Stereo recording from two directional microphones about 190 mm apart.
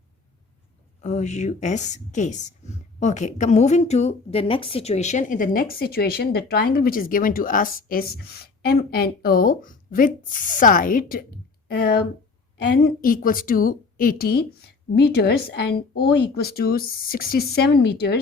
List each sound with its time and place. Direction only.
1.0 s a woman's voice: 35° left (ahead or behind); by 18.2 s 60° left (ahead or behind)